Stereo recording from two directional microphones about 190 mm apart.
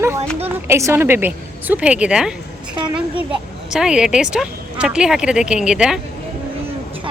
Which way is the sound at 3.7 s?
5° right (ahead or behind).